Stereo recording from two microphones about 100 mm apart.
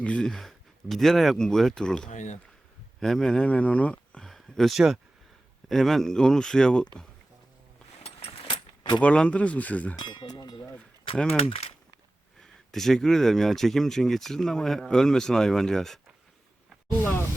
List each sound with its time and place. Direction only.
0.0 s speech: 10° left (ahead or behind)
8.0 s a sound: 80° left
9.0 s speech: 10° left (ahead or behind)
9.9 s a sound: 50° left (ahead or behind)
11.3 s speech: 75° left (ahead or behind)
12.4 s speech: 5° left (ahead or behind)